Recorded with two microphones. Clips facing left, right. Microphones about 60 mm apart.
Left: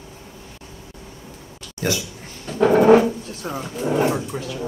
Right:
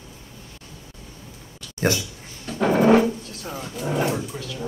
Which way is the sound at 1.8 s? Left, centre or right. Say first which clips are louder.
Right 1 dB; right.